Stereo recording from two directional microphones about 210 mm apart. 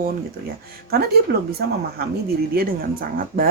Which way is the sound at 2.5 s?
45° right (ahead or behind).